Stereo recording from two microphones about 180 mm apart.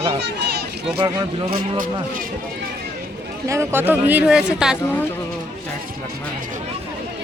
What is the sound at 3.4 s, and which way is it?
Speech, 15° right (ahead or behind).